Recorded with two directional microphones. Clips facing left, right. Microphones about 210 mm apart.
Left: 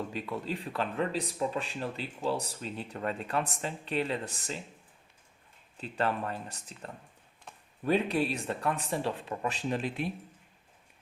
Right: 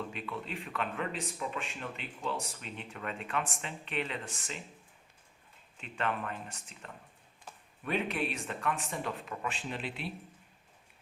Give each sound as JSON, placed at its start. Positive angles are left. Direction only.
{"t": 0.1, "sound": "speech", "side_deg": 35}
{"t": 5.7, "sound": "speech", "side_deg": 35}